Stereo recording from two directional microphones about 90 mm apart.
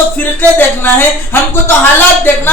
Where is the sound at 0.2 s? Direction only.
20° left (ahead or behind).